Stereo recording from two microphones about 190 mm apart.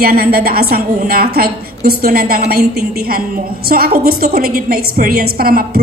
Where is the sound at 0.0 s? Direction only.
50° right (ahead or behind).